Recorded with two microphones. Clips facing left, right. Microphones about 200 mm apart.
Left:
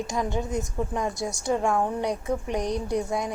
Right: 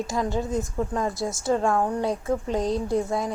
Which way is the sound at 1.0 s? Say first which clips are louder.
Right 2 dB; centre (ahead or behind).